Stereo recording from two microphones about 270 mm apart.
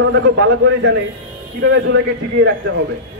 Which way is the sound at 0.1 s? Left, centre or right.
Right.